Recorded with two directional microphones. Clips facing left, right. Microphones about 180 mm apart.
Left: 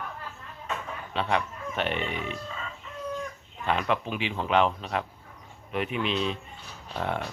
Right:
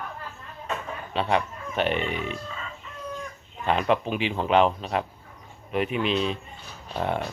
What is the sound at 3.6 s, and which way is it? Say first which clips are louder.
Speech: right 4 dB; 25° right (ahead or behind).